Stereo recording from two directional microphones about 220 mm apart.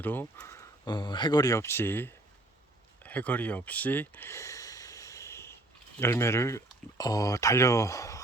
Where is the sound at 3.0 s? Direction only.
5° left (ahead or behind).